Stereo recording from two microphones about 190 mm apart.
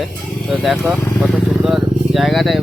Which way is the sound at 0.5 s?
Centre (ahead or behind).